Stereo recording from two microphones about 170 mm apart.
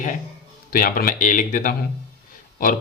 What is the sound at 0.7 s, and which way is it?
Speech, 55° left (ahead or behind).